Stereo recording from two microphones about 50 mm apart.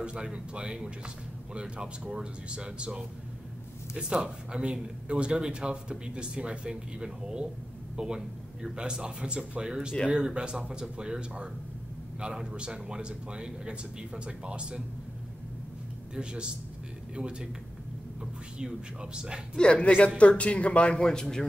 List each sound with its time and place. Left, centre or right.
0.0 s speech: right
16.2 s speech: centre
19.6 s speech: left